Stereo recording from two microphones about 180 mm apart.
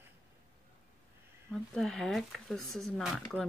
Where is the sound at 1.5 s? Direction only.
Centre (ahead or behind).